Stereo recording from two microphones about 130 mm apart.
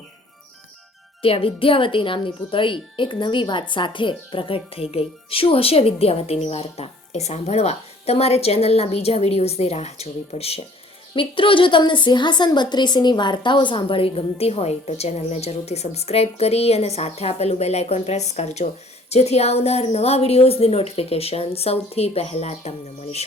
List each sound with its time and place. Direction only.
1.2 s speech: 45° left (ahead or behind)